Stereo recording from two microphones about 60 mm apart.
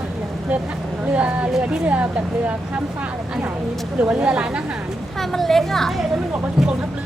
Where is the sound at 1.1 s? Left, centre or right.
Right.